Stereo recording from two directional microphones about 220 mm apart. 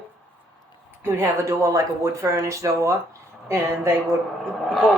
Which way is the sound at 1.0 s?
10° right (ahead or behind).